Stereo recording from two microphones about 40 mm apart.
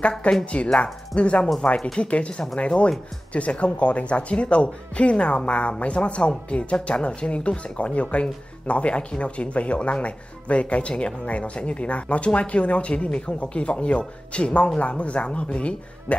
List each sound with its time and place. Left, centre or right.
0.2 s speech: left